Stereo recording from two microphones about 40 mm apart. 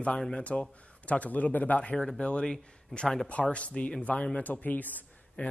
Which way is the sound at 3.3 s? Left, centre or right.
Left.